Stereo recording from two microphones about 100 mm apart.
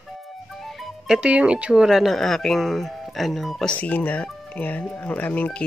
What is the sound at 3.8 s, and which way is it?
Speech, 15° left (ahead or behind).